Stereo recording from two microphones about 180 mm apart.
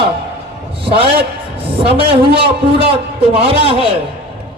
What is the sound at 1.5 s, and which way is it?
A man's voice, 30° right (ahead or behind).